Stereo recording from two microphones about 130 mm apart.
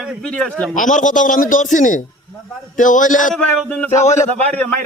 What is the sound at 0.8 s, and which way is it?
A man's voice, 80° left.